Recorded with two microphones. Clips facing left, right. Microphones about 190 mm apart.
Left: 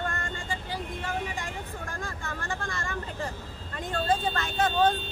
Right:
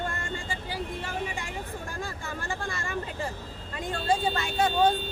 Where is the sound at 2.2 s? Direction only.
15° right (ahead or behind).